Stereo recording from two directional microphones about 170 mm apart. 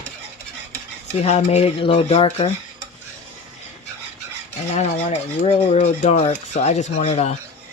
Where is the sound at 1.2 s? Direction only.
40° left (ahead or behind).